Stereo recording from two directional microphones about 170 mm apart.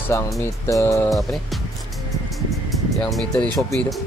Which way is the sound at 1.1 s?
Centre (ahead or behind).